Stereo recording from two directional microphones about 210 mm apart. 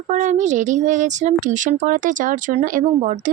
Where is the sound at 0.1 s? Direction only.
35° right (ahead or behind).